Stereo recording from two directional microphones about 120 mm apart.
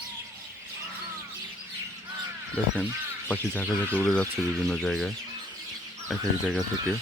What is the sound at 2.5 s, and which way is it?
Speech, 15° left (ahead or behind).